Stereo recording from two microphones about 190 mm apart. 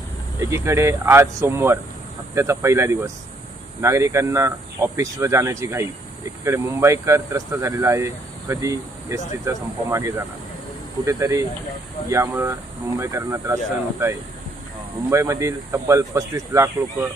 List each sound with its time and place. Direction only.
0.4 s speech: 15° right (ahead or behind)